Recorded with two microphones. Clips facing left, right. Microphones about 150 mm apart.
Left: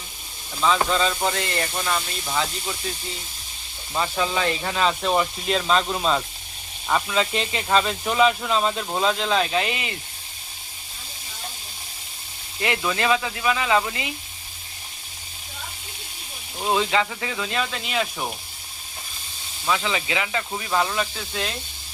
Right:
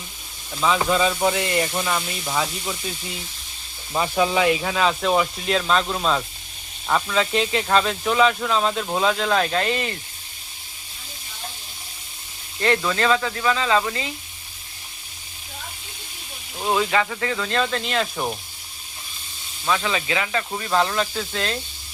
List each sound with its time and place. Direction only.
0.6 s speech: 5° right (ahead or behind)
3.9 s speech: 10° right (ahead or behind); by 9.9 s 10° left (ahead or behind)
12.6 s speech: 15° left (ahead or behind)
16.7 s speech: 20° left (ahead or behind)
19.7 s speech: 20° left (ahead or behind)
20.7 s speech: 5° left (ahead or behind)